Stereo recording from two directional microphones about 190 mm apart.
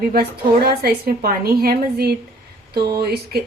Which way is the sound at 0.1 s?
55° right (ahead or behind).